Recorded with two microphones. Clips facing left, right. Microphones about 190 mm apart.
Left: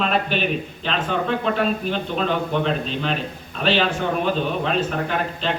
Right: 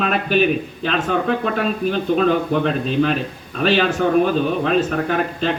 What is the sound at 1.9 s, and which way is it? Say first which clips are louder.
Speech: right 6 dB; 45° right (ahead or behind).